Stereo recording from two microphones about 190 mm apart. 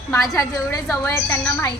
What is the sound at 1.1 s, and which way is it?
Speech, 15° left (ahead or behind).